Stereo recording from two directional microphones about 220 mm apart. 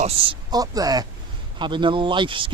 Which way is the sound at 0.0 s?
20° right (ahead or behind).